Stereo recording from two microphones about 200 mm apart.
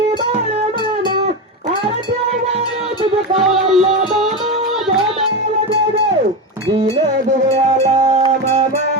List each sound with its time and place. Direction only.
3.3 s music: centre (ahead or behind)
6.7 s a sound: 30° right (ahead or behind)
7.4 s music: 35° right (ahead or behind)